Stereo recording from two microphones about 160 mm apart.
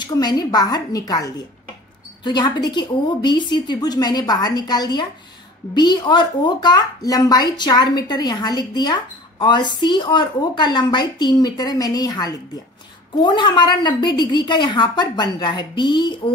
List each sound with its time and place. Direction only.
0.0 s speech: 25° left (ahead or behind)